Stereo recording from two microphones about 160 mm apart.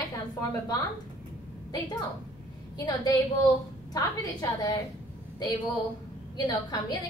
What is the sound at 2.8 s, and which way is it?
A woman's voice, 25° left (ahead or behind).